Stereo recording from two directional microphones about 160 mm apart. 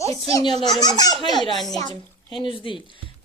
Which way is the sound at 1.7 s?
25° left (ahead or behind).